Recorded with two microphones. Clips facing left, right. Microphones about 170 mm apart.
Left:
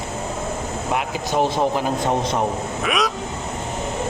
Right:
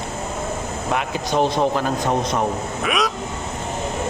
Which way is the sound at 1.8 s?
20° left (ahead or behind).